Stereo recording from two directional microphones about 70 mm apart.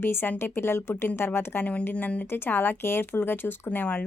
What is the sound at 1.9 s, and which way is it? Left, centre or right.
A woman's voice, centre.